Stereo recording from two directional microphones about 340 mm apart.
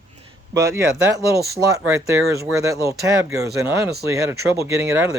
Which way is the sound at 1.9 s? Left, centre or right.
Centre.